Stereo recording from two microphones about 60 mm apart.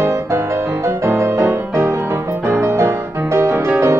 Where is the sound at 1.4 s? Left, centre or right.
Right.